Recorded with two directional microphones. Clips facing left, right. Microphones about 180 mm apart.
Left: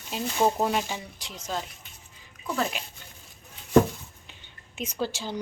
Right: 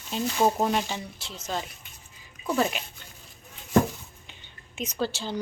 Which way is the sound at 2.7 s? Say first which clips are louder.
Right 1 dB; centre (ahead or behind).